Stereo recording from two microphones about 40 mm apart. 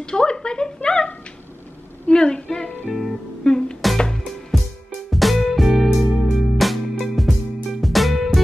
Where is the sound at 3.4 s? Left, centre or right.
Centre.